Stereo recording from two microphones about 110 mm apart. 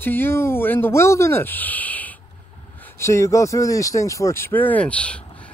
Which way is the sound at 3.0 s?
25° left (ahead or behind).